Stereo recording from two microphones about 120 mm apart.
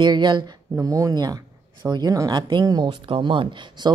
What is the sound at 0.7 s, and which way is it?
Speech, 30° right (ahead or behind).